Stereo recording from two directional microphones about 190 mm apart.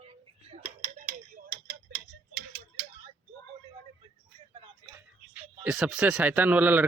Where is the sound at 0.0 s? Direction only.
30° right (ahead or behind).